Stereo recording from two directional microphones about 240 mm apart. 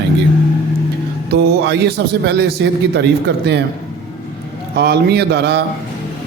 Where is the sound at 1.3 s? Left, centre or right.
Right.